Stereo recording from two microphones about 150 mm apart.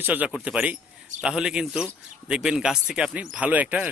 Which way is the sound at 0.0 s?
10° right (ahead or behind).